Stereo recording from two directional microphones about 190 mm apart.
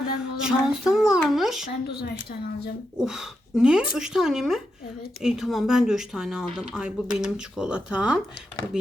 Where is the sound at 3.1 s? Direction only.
5° right (ahead or behind).